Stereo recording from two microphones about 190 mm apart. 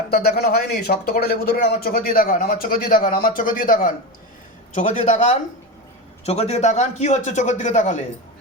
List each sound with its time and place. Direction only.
0.1 s a man's voice: 55° left (ahead or behind)